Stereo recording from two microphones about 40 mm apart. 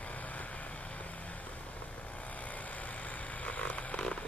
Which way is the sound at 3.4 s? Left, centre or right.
Left.